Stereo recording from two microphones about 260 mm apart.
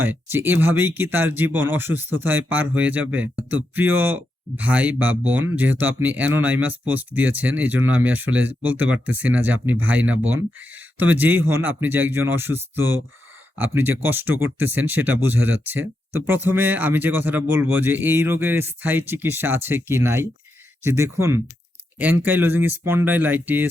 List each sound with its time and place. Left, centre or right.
0.0 s speech: centre